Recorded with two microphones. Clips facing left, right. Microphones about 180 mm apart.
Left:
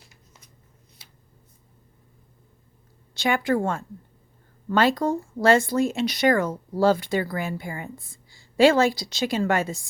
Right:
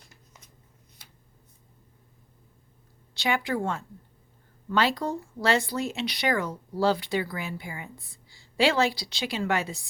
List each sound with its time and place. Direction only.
3.2 s speech: 50° left (ahead or behind)